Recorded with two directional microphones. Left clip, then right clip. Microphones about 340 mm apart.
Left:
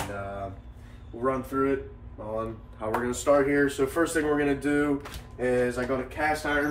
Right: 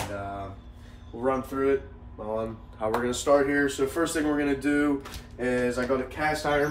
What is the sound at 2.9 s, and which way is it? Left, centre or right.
Speech, centre.